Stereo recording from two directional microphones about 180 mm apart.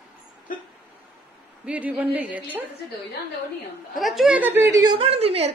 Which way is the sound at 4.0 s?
Centre (ahead or behind).